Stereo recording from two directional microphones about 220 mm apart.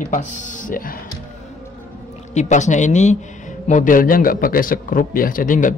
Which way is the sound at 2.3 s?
30° left (ahead or behind).